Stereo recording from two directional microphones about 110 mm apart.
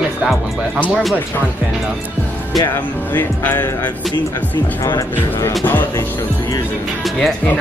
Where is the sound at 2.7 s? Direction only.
20° left (ahead or behind).